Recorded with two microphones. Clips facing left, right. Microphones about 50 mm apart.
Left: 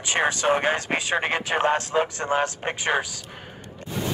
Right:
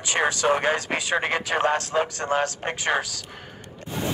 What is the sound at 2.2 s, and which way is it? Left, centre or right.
Speech, left.